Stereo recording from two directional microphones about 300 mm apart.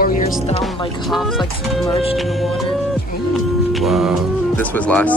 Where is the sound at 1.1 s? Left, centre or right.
Centre.